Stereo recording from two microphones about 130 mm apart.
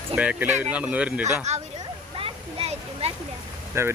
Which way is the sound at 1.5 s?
60° right (ahead or behind).